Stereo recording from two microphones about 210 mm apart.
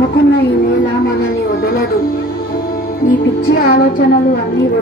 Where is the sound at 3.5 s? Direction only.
45° left (ahead or behind).